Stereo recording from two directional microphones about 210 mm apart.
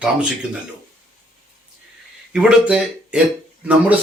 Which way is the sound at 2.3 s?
5° right (ahead or behind).